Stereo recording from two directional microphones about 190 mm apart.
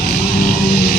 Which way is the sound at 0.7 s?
55° left (ahead or behind).